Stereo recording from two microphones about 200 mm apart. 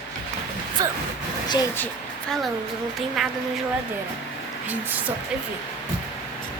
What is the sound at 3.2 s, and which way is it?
Speech, centre (ahead or behind).